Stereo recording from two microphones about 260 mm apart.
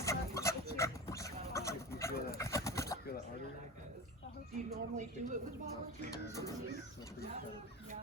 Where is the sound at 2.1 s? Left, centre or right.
Left.